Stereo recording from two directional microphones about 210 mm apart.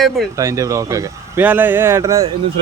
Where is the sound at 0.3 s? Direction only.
15° right (ahead or behind).